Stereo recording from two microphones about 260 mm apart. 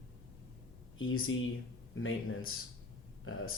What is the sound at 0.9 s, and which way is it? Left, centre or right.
Speech, left.